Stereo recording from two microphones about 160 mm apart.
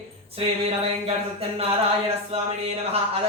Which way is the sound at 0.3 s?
40° right (ahead or behind).